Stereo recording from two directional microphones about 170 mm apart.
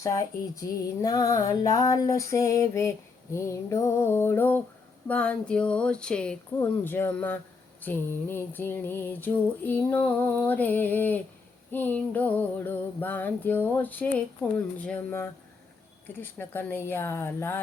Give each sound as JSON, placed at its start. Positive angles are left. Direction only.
{"t": 0.0, "sound": "music", "side_deg": 20}
{"t": 16.4, "sound": "music", "side_deg": 10}